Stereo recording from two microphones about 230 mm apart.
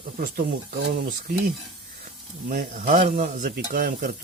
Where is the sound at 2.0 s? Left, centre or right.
Right.